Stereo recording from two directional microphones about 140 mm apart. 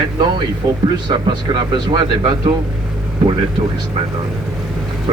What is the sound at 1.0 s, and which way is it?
Speech, 35° right (ahead or behind).